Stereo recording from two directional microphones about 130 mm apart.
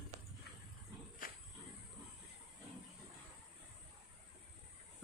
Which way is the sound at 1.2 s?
90° left.